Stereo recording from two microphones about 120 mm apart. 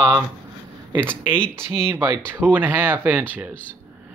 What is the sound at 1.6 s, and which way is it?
Speech, 20° right (ahead or behind).